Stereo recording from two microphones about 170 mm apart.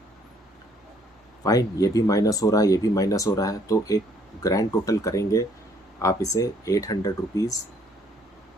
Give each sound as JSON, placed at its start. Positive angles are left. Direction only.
{"t": 1.5, "sound": "speech", "side_deg": 20}